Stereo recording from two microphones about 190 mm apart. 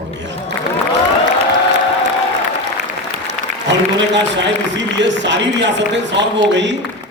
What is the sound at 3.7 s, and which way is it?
A man's voice, 70° right (ahead or behind).